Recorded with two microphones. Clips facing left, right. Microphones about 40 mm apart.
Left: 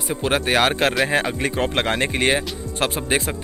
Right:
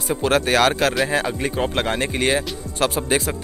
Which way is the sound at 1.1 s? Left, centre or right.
Left.